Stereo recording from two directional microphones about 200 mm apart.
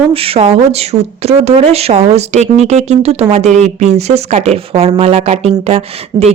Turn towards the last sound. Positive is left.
turn(degrees=-30)  # may be behind; listen again after turning